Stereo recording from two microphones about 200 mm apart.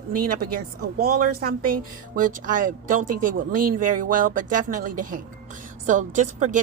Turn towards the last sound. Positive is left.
turn(degrees=-40)  # may be behind; listen again after turning